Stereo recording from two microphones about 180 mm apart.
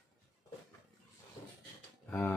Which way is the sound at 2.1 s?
15° left (ahead or behind).